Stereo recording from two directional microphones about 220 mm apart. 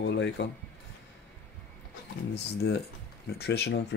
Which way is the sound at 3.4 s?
50° left (ahead or behind).